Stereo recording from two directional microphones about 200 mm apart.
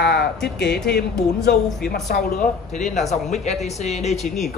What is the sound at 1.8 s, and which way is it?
Speech, 50° left (ahead or behind).